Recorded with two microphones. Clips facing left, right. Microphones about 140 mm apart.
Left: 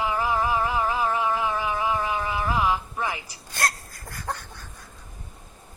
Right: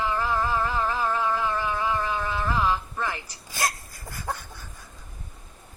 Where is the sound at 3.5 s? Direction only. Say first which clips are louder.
Left 1 dB; 5° right (ahead or behind).